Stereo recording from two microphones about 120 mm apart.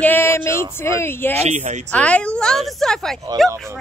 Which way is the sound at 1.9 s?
10° left (ahead or behind).